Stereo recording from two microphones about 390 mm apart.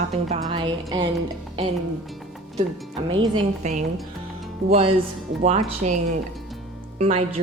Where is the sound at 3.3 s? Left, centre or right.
Centre.